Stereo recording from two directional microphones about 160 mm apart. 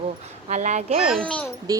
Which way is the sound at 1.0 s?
5° right (ahead or behind).